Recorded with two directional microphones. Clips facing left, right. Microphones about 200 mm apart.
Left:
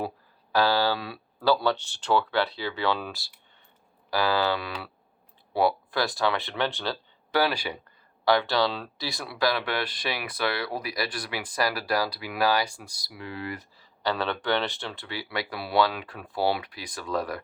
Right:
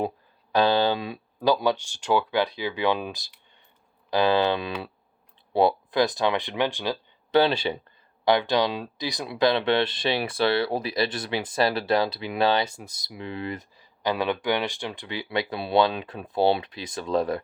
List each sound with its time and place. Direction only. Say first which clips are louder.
0.5 s speech: right 3 dB; 20° right (ahead or behind)